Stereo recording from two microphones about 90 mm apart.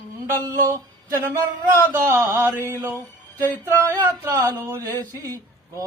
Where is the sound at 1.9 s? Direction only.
30° right (ahead or behind).